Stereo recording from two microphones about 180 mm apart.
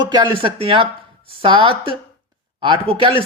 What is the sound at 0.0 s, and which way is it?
Speech, 25° right (ahead or behind).